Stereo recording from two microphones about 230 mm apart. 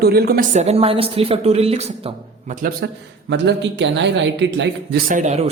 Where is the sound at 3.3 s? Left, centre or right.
Right.